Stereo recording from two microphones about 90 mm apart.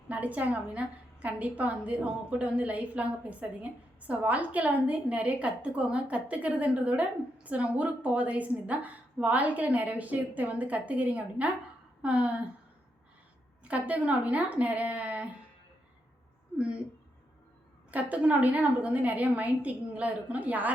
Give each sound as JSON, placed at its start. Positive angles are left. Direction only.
{"t": 0.1, "sound": "a woman's voice", "side_deg": -15}
{"t": 13.7, "sound": "a woman's voice", "side_deg": -15}
{"t": 17.9, "sound": "a woman's voice", "side_deg": -15}